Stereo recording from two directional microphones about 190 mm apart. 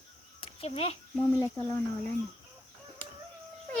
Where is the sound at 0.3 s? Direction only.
30° left (ahead or behind).